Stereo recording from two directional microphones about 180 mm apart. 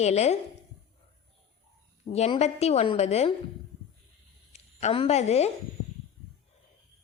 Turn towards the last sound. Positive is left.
turn(degrees=35)  # may be behind; listen again after turning